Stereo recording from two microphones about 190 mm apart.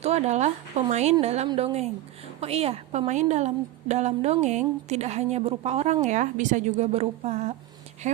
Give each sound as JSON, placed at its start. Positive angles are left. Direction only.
{"t": 0.0, "sound": "a woman's voice", "side_deg": -35}